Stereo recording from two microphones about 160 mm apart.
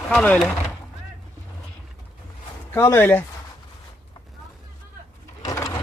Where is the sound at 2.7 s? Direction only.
15° left (ahead or behind).